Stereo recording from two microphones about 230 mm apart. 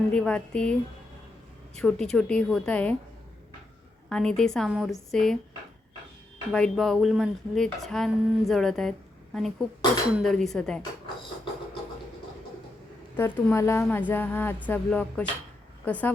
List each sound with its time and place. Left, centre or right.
0.1 s speech: centre
1.8 s speech: centre
4.1 s speech: centre
6.5 s speech: centre
13.1 s a sound: centre